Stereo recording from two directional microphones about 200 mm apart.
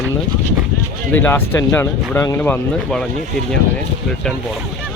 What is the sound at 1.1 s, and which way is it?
Speech, 10° left (ahead or behind).